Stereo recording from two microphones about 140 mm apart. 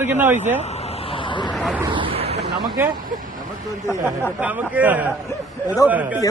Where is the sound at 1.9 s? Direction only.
40° right (ahead or behind).